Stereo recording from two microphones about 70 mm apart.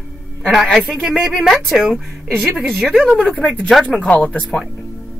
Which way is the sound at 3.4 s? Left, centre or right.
Centre.